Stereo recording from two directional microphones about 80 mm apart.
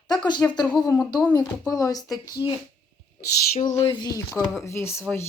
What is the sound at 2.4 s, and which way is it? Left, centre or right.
Speech, left.